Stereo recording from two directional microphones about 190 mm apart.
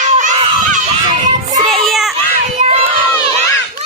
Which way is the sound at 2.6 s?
35° right (ahead or behind).